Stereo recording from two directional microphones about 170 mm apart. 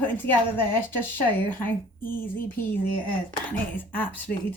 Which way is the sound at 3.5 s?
10° left (ahead or behind).